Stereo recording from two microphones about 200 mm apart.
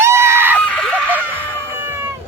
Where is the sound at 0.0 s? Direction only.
15° right (ahead or behind).